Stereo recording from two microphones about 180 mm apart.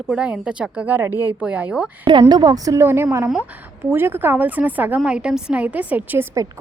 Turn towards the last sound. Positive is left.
turn(degrees=-15)  # may be behind; listen again after turning